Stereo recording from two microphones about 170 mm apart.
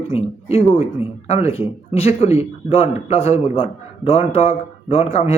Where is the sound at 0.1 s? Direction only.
35° left (ahead or behind).